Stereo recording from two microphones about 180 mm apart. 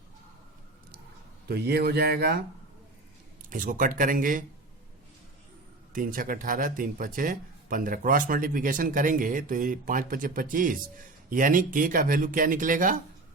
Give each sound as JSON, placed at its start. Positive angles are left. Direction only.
{"t": 1.5, "sound": "speech", "side_deg": -60}
{"t": 3.5, "sound": "speech", "side_deg": -50}
{"t": 5.9, "sound": "speech", "side_deg": -50}